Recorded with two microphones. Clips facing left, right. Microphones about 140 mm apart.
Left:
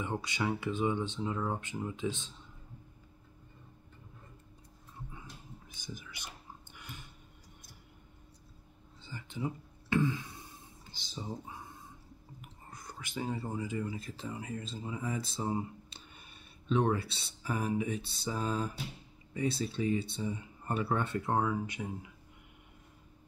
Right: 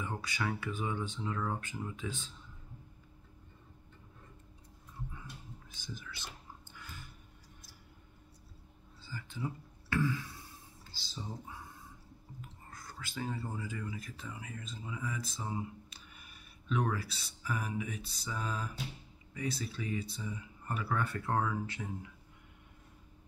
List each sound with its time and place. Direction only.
0.0 s speech: 20° left (ahead or behind)
5.7 s whispering: 15° left (ahead or behind)
9.0 s a sound: 20° left (ahead or behind)
10.9 s speech: 20° left (ahead or behind)
12.4 s whispering: 20° left (ahead or behind)
13.8 s speech: 30° left (ahead or behind)